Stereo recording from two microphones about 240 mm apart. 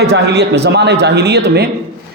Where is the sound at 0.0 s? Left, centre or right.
Right.